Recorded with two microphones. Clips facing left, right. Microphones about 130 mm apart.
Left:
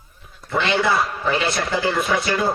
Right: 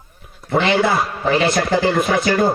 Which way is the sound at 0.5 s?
30° right (ahead or behind).